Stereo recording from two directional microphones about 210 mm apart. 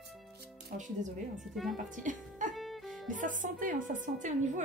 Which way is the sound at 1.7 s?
35° right (ahead or behind).